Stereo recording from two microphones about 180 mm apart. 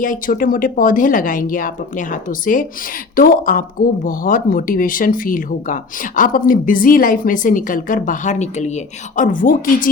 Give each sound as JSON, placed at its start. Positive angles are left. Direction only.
{"t": 0.0, "sound": "speech", "side_deg": 50}